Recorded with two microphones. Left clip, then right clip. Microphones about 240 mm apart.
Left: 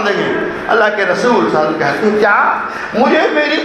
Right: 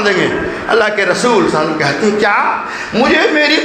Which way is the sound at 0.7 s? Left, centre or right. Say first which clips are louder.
Even; right.